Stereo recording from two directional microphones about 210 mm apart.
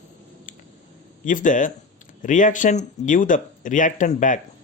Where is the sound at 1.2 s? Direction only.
40° left (ahead or behind).